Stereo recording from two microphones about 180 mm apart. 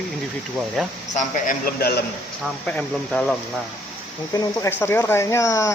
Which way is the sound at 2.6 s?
5° left (ahead or behind).